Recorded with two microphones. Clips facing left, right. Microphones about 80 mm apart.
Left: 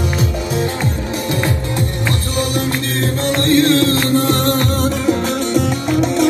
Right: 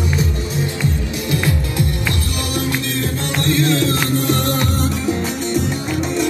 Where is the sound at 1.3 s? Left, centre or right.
Left.